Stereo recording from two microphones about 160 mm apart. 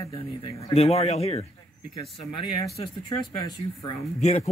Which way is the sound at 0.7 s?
40° left (ahead or behind).